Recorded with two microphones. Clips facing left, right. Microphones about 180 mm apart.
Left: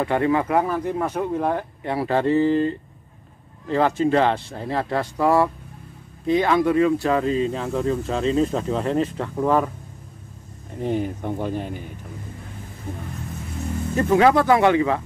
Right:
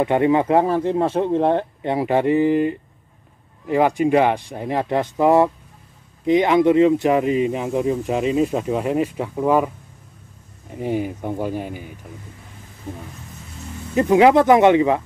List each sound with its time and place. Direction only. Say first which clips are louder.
0.0 s speech: right 4 dB; 20° right (ahead or behind)
10.8 s speech: right 1 dB; 10° right (ahead or behind)
13.9 s speech: right 4 dB; 15° right (ahead or behind)